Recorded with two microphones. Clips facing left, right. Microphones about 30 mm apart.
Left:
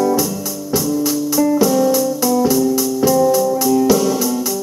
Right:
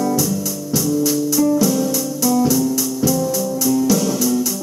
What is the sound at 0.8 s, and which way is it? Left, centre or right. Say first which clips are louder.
Music: right 1 dB; centre.